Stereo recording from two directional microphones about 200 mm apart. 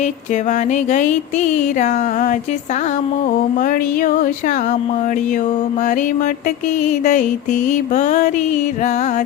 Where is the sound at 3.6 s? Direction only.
45° left (ahead or behind).